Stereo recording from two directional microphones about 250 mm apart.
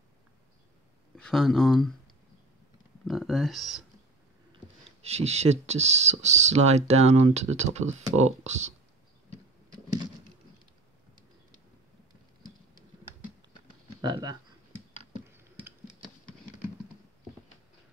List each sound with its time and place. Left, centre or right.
1.1 s speech: centre
3.1 s speech: centre
5.0 s speech: right
14.0 s speech: centre
15.2 s a sound: centre